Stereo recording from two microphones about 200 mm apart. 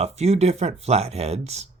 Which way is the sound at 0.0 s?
30° right (ahead or behind).